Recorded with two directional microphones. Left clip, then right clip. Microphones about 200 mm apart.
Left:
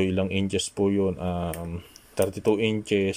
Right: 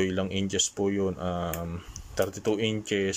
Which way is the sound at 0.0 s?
5° left (ahead or behind).